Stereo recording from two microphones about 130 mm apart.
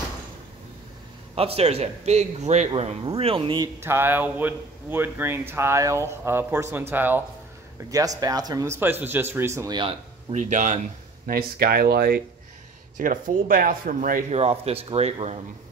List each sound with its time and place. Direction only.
1.3 s a man's voice: 50° right (ahead or behind)
3.6 s speech: 20° right (ahead or behind)
7.9 s speech: 30° right (ahead or behind)
9.7 s speech: 35° right (ahead or behind)
10.3 s a man's voice: 70° right (ahead or behind)
12.9 s speech: 90° right
14.3 s speech: 50° right (ahead or behind)